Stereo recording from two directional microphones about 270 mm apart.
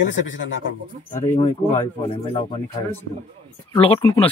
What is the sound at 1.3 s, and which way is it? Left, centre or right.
Speech, left.